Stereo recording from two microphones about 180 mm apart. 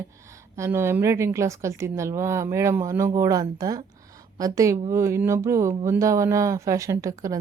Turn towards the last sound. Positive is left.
turn(degrees=-20)  # may be behind; listen again after turning